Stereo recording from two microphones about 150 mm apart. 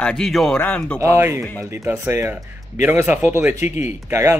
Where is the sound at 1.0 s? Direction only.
20° right (ahead or behind).